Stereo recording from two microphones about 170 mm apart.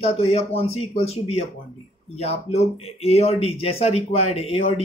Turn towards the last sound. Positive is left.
turn(degrees=35)  # may be behind; listen again after turning